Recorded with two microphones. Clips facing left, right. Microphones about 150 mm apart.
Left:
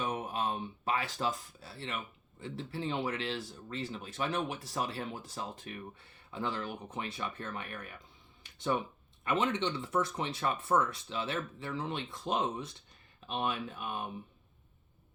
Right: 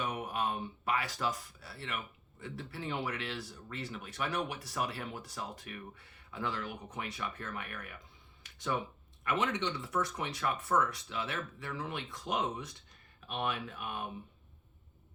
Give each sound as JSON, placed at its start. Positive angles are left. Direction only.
{"t": 0.0, "sound": "a sound", "side_deg": 25}
{"t": 2.4, "sound": "speech", "side_deg": 25}
{"t": 9.2, "sound": "speech", "side_deg": 25}